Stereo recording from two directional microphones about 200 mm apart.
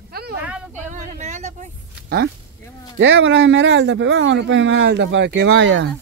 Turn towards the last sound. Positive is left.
turn(degrees=-65)  # may be behind; listen again after turning